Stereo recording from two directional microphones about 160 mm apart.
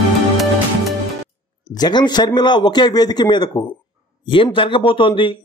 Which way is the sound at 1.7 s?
25° left (ahead or behind).